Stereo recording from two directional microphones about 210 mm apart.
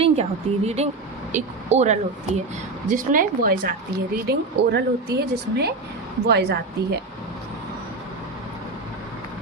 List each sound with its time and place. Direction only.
0.0 s a woman's voice: 30° right (ahead or behind); by 7.0 s 50° right (ahead or behind)